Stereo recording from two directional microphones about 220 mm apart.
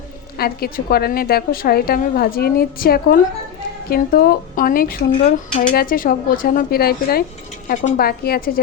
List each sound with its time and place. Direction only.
0.3 s a woman's voice: 45° left (ahead or behind)